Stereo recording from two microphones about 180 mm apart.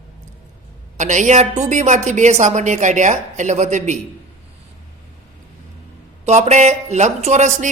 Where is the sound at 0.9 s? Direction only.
45° right (ahead or behind).